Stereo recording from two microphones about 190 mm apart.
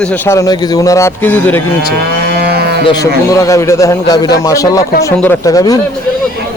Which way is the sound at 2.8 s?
20° left (ahead or behind).